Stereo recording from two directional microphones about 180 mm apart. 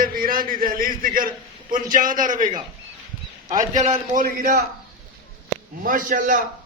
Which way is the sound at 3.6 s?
45° right (ahead or behind).